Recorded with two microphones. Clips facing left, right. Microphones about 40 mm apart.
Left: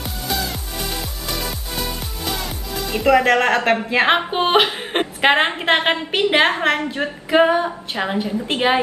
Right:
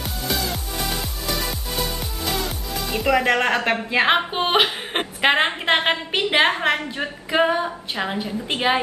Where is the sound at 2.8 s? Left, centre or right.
Centre.